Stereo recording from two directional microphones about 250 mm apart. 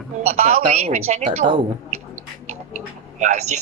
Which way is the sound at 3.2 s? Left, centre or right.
Right.